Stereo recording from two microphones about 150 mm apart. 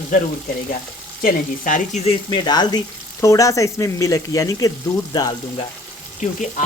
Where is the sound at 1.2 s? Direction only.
60° left (ahead or behind).